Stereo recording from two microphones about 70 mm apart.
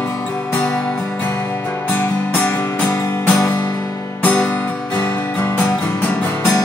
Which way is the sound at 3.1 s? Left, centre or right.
Left.